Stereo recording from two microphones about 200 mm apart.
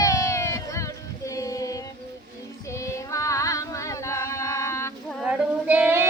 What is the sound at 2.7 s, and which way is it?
Female singing, 15° left (ahead or behind).